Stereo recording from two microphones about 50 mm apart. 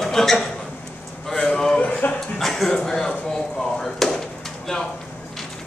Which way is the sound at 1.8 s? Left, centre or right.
Left.